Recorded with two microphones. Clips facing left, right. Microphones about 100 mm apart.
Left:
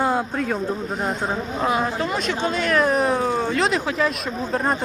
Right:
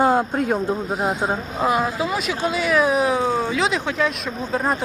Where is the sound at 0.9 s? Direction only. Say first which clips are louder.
Right 3 dB; 5° right (ahead or behind).